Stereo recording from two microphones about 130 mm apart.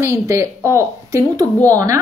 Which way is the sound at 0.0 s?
20° right (ahead or behind).